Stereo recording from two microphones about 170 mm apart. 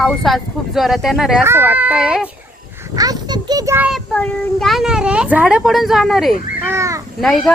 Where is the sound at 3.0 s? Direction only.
25° right (ahead or behind).